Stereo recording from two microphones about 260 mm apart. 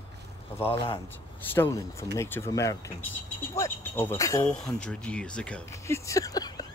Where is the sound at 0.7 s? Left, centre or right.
Left.